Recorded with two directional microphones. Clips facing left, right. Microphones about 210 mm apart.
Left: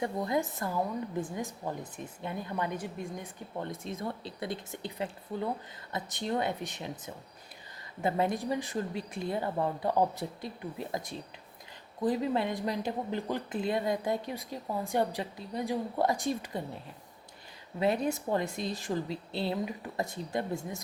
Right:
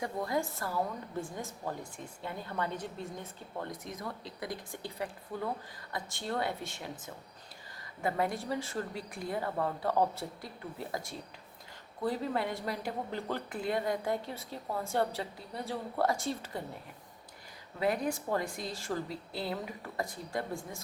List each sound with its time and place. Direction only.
0.0 s a woman's voice: 20° left (ahead or behind)
3.7 s a woman's voice: 25° left (ahead or behind)
8.0 s a woman's voice: 20° left (ahead or behind)
17.7 s a woman's voice: 25° left (ahead or behind)